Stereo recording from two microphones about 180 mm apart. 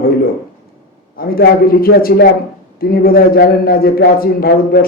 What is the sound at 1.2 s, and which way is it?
A man's voice, 55° left (ahead or behind).